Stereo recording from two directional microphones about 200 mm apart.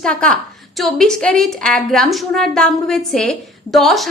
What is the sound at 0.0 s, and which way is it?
A woman's voice, 5° left (ahead or behind).